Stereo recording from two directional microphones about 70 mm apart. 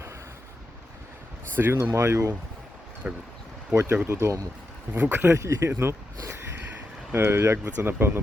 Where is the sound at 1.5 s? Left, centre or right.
Right.